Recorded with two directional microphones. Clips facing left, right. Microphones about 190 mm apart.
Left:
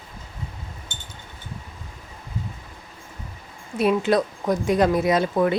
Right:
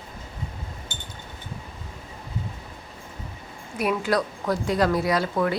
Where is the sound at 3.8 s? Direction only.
25° left (ahead or behind).